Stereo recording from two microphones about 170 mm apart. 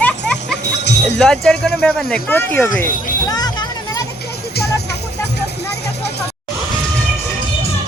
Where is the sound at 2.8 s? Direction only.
20° left (ahead or behind).